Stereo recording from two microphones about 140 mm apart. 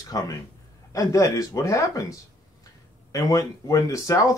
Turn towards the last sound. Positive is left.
turn(degrees=25)  # may be behind; listen again after turning